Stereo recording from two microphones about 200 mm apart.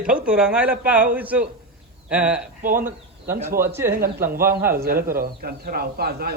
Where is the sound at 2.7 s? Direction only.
10° right (ahead or behind).